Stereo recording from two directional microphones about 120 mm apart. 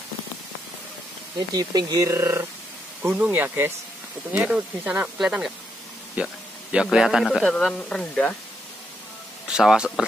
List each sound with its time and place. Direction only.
1.5 s a man's voice: 35° right (ahead or behind); by 7.4 s centre (ahead or behind)
7.4 s speech: 10° left (ahead or behind)
9.5 s speech: 5° right (ahead or behind)